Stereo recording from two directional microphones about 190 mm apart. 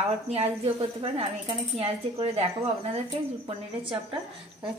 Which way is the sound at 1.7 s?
30° right (ahead or behind).